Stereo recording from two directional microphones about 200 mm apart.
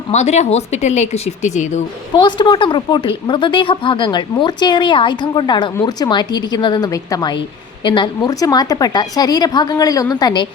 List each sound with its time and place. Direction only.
0.1 s speech: 35° left (ahead or behind)
2.1 s a woman's voice: 25° left (ahead or behind)